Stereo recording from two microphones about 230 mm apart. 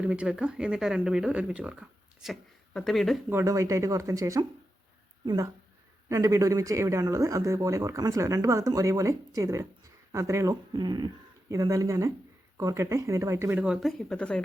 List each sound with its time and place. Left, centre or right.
0.0 s speech: centre
3.3 s speech: centre